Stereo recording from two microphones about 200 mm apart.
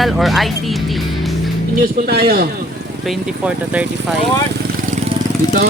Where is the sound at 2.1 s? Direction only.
50° right (ahead or behind).